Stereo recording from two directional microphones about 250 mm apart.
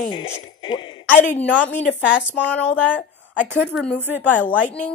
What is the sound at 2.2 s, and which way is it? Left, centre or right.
Speech, centre.